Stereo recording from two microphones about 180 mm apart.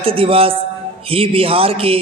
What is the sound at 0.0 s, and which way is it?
Speech, 30° right (ahead or behind).